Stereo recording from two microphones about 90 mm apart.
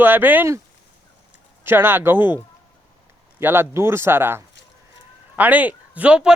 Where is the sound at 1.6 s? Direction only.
25° right (ahead or behind).